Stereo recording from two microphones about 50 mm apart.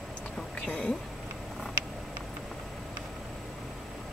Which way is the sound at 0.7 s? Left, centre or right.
Centre.